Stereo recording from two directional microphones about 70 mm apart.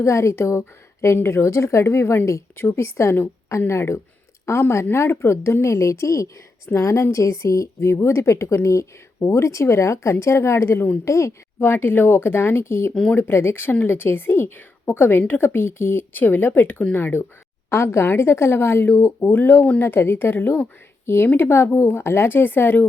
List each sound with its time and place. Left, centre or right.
0.0 s a woman's voice: left
11.6 s speech: left